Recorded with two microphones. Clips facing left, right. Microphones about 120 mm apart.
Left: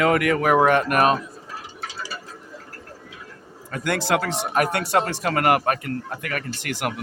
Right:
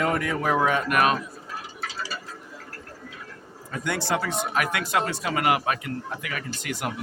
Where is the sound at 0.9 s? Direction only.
35° left (ahead or behind).